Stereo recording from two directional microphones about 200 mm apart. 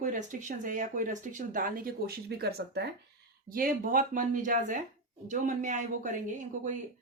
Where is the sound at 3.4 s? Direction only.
45° right (ahead or behind).